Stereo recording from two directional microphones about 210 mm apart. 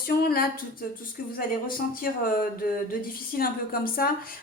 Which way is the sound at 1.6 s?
40° left (ahead or behind).